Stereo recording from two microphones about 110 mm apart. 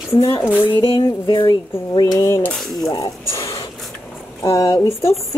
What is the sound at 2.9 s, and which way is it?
Speech, 30° left (ahead or behind).